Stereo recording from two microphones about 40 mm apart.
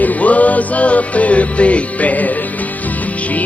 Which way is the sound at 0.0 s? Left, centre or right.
Left.